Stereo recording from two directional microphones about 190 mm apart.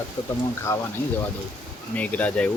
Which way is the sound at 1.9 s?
10° left (ahead or behind).